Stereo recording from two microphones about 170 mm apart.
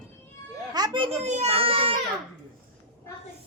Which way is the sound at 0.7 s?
25° right (ahead or behind).